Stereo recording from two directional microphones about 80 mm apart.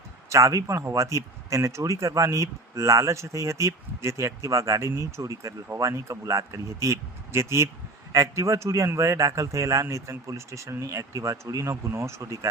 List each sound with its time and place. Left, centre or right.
0.3 s a man's voice: right